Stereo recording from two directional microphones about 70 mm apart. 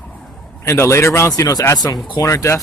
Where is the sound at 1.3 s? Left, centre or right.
Left.